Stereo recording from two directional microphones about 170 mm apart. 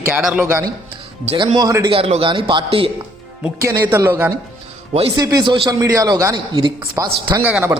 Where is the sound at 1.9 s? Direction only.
35° right (ahead or behind).